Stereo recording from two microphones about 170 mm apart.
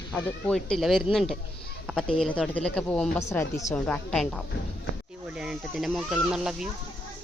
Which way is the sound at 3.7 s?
5° left (ahead or behind).